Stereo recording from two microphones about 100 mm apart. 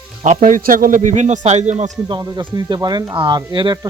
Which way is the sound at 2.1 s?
45° right (ahead or behind).